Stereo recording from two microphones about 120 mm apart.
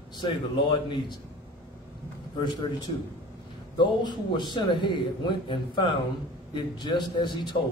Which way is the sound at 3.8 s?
40° left (ahead or behind).